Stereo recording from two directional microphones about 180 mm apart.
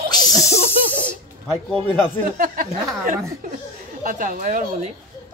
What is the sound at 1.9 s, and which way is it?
Speech, 10° left (ahead or behind).